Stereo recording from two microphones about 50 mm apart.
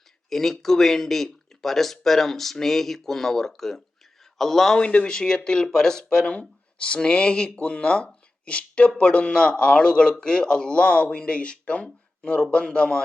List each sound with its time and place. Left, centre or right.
0.3 s speech: centre
4.8 s a man's voice: left